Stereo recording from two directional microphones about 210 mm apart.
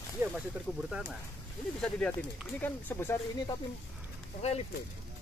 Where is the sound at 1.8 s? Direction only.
5° left (ahead or behind).